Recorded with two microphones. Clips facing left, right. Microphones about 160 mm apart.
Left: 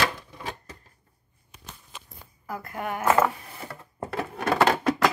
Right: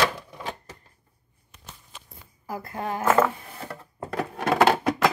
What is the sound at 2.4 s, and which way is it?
Speech, 30° right (ahead or behind).